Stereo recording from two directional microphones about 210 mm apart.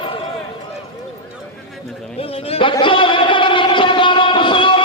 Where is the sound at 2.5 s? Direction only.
25° left (ahead or behind).